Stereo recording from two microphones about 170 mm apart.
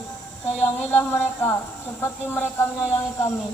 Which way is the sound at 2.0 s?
10° left (ahead or behind).